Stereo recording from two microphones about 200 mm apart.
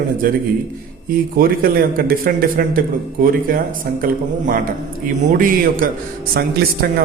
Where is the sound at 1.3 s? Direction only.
45° right (ahead or behind).